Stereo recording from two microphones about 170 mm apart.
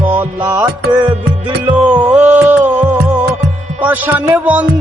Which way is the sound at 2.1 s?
10° right (ahead or behind).